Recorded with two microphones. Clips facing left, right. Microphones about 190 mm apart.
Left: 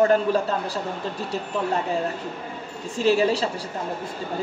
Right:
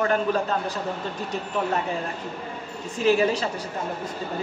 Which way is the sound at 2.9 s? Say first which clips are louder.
Left 1 dB; 30° left (ahead or behind).